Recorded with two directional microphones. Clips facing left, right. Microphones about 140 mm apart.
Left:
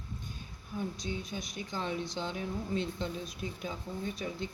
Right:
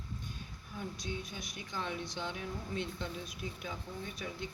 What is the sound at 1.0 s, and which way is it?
Speech, 25° left (ahead or behind).